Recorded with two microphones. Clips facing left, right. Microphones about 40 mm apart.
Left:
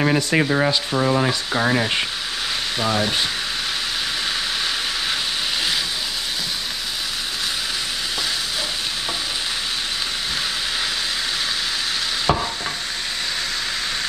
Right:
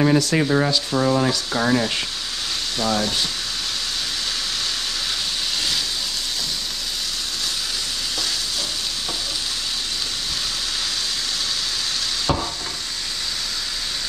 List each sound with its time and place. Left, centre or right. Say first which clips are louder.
0.0 s speech: right 1 dB; left
12.3 s stir: left 3 dB; left